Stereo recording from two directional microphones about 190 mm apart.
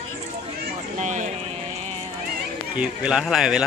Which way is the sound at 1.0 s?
40° right (ahead or behind).